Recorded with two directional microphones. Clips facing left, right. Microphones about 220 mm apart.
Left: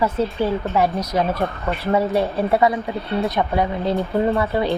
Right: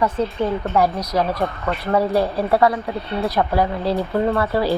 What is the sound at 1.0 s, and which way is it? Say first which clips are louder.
Speech: even; 25° left (ahead or behind).